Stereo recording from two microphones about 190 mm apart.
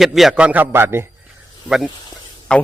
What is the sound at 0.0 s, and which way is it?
A man's voice, centre (ahead or behind).